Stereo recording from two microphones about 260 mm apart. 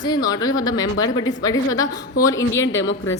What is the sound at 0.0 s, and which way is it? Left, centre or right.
Speech, centre.